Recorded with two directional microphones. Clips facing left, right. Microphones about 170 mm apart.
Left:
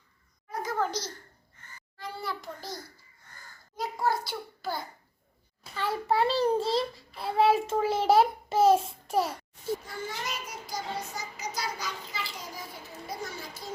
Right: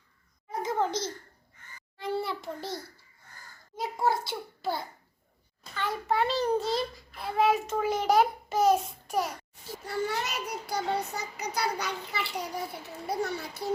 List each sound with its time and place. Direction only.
0.5 s a sound: 25° right (ahead or behind)
5.8 s a child's voice: 30° left (ahead or behind)
9.8 s a child's voice: 70° right (ahead or behind)